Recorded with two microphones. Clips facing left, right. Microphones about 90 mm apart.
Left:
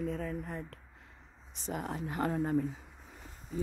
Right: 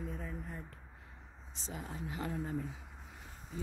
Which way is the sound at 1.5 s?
60° left (ahead or behind).